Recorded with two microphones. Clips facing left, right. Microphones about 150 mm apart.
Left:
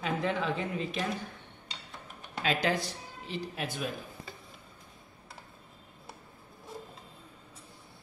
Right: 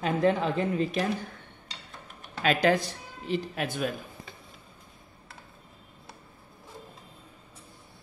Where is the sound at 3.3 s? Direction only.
60° right (ahead or behind).